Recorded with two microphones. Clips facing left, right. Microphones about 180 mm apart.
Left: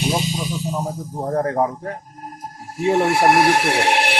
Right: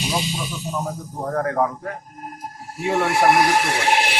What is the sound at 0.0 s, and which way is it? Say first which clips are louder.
A man's voice: left 3 dB; 45° left (ahead or behind).